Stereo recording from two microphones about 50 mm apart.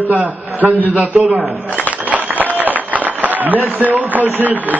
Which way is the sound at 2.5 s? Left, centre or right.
Right.